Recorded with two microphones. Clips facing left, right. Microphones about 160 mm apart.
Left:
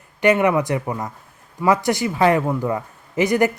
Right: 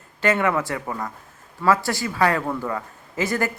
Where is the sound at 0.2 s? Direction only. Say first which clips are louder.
Left 5 dB; 15° left (ahead or behind).